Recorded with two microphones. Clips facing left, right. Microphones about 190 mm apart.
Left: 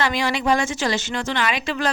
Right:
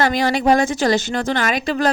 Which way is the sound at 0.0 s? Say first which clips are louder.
Right 5 dB; 45° right (ahead or behind).